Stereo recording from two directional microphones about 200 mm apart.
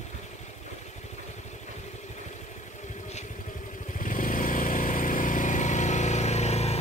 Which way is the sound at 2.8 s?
35° left (ahead or behind).